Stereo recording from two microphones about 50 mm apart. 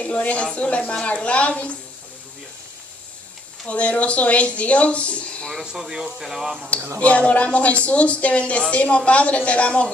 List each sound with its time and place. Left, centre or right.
0.0 s speech: left
3.6 s speech: left
5.6 s speech: centre
7.1 s speech: left